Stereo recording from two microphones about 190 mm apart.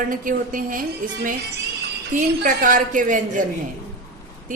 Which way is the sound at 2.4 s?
45° right (ahead or behind).